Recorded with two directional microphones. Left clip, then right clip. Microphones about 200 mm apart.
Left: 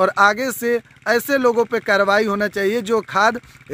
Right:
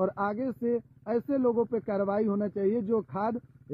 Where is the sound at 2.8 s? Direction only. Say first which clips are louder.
Left 13 dB; 25° left (ahead or behind).